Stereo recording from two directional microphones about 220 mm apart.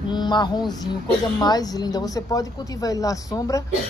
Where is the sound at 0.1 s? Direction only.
20° left (ahead or behind).